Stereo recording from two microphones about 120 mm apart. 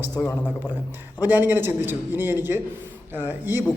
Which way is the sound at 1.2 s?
15° right (ahead or behind).